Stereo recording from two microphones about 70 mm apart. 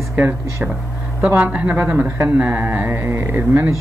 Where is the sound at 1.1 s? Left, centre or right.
Right.